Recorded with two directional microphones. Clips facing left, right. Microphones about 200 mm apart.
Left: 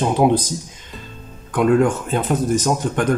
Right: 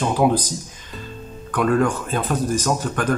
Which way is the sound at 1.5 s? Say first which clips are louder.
Left 3 dB; 20° left (ahead or behind).